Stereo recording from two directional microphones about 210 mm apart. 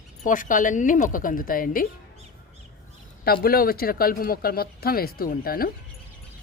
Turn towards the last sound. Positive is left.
turn(degrees=45)  # may be behind; listen again after turning